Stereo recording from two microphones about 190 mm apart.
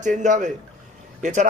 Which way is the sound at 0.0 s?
40° right (ahead or behind).